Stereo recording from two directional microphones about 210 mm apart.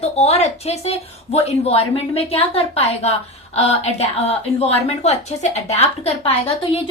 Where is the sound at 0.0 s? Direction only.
30° left (ahead or behind).